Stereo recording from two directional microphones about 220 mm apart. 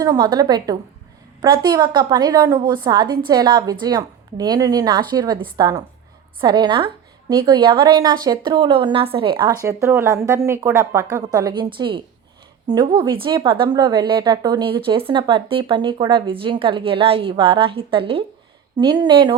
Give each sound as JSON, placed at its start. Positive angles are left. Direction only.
{"t": 0.0, "sound": "a woman's voice", "side_deg": -20}